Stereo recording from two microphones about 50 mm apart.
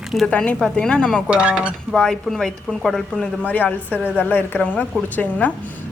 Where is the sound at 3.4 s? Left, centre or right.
Left.